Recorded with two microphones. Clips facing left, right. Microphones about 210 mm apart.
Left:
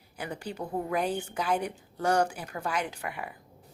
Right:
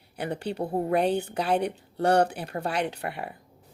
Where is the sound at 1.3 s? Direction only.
35° right (ahead or behind).